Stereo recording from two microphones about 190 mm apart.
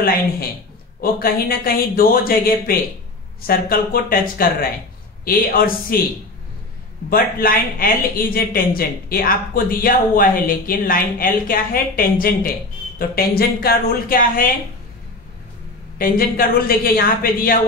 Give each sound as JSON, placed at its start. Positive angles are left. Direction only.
{"t": 1.2, "sound": "a man's voice", "side_deg": 50}
{"t": 7.1, "sound": "a man's voice", "side_deg": 50}
{"t": 16.0, "sound": "a man's voice", "side_deg": 50}